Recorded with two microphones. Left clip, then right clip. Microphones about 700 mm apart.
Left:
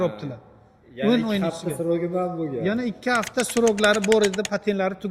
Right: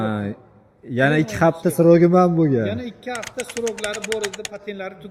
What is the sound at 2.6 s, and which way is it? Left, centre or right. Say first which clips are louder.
Speech: left 2 dB; left.